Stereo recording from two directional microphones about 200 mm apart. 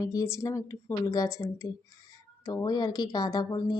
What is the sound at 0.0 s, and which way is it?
A woman's voice, 15° left (ahead or behind).